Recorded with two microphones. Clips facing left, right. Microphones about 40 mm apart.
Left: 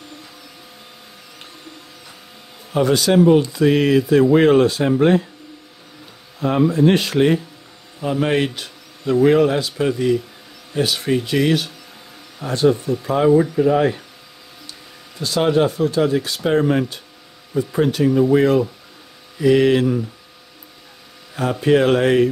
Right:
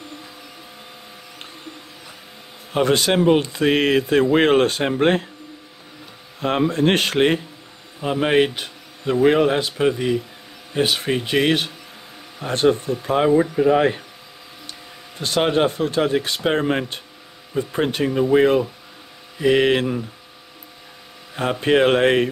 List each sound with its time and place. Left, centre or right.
2.7 s speech: right
6.4 s speech: right
8.0 s a man's voice: right
9.8 s a man's voice: centre; by 13.3 s right
13.4 s a man's voice: right
14.7 s speech: right
21.4 s speech: right